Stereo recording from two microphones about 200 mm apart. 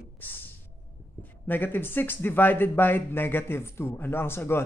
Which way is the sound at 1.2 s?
10° left (ahead or behind).